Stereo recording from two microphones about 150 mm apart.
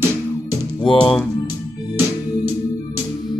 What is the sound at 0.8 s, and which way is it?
Music, 35° left (ahead or behind).